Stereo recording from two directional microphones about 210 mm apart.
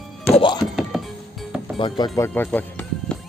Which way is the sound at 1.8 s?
20° left (ahead or behind).